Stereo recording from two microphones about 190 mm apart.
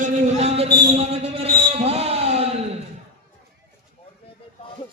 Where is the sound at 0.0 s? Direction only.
35° right (ahead or behind).